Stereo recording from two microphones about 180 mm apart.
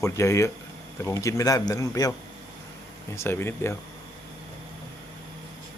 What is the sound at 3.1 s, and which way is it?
Speech, 15° left (ahead or behind).